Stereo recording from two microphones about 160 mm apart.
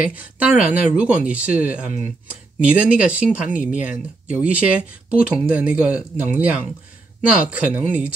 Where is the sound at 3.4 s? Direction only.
55° left (ahead or behind).